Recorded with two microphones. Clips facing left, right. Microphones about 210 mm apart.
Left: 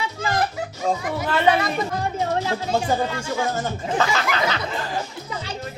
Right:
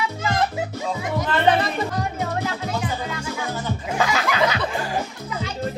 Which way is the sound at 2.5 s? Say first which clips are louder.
Left 4 dB; 30° left (ahead or behind).